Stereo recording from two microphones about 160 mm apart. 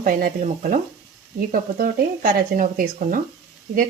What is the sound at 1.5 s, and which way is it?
Sizzle, 65° right (ahead or behind).